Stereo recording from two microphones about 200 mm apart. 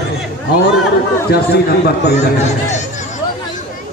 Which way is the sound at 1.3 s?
55° left (ahead or behind).